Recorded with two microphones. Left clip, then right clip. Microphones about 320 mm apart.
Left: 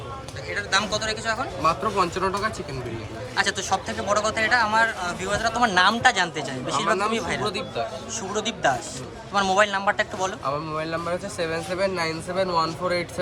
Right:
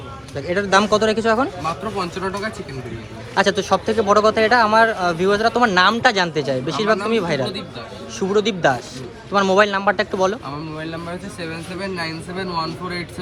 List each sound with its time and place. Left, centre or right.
0.3 s speech: centre
3.3 s a man's voice: centre
7.1 s speech: left
8.3 s a man's voice: centre
10.8 s speech: left